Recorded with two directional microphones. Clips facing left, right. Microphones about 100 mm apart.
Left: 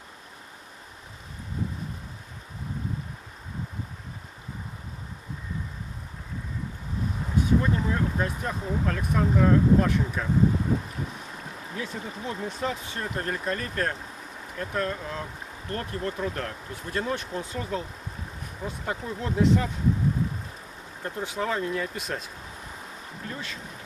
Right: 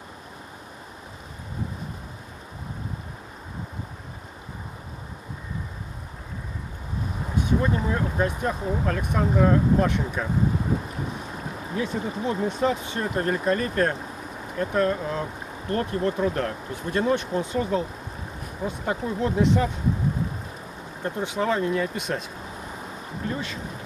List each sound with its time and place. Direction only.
7.2 s speech: 20° right (ahead or behind)
11.1 s speech: 40° right (ahead or behind); by 19.7 s 20° right (ahead or behind)
21.0 s speech: 20° right (ahead or behind)
22.7 s a sound: 30° right (ahead or behind)